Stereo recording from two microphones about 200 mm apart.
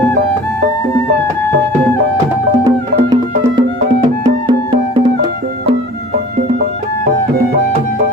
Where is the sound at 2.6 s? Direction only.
20° right (ahead or behind).